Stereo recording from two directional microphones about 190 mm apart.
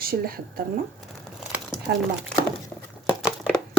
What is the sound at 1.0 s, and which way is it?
Crumpling, 5° right (ahead or behind).